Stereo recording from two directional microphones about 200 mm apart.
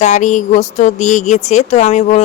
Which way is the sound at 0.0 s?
35° left (ahead or behind).